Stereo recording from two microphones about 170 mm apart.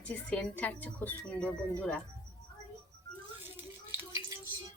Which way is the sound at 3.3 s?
10° right (ahead or behind).